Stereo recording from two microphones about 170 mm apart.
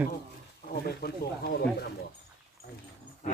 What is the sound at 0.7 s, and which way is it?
Speech, 65° left (ahead or behind).